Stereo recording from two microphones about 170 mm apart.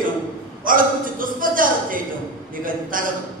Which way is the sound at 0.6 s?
55° right (ahead or behind).